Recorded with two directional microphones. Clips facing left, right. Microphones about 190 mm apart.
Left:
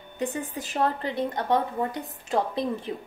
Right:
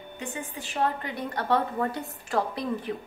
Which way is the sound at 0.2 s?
35° left (ahead or behind).